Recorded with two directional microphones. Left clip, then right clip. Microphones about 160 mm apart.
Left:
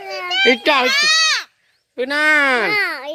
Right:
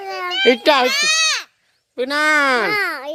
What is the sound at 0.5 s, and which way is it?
Speech, 15° right (ahead or behind).